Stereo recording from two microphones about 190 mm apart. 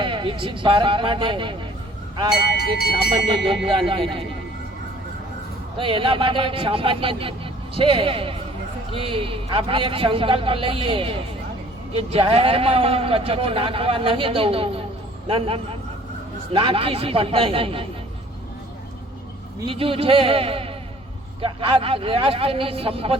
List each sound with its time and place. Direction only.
0.0 s speech: 25° right (ahead or behind)
2.9 s speech: 25° right (ahead or behind)
5.7 s speech: 25° right (ahead or behind)
19.5 s speech: 25° right (ahead or behind)